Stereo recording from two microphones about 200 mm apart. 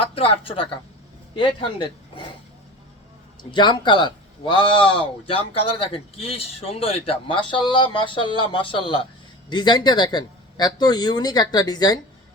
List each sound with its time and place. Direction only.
0.0 s speech: 25° left (ahead or behind)
3.5 s speech: 25° left (ahead or behind)